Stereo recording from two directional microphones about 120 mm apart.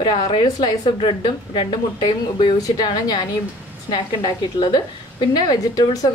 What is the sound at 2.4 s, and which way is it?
A woman's voice, 35° left (ahead or behind).